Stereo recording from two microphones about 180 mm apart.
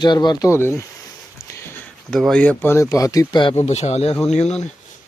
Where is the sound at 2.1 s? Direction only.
5° left (ahead or behind); by 3.6 s 25° left (ahead or behind).